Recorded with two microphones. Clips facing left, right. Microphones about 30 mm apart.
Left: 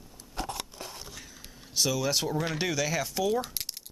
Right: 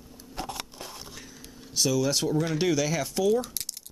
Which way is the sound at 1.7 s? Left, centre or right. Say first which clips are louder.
Right 2 dB; centre.